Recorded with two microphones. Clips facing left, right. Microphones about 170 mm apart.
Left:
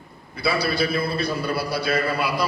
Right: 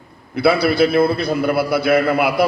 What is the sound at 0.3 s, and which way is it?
A man's voice, 60° right (ahead or behind).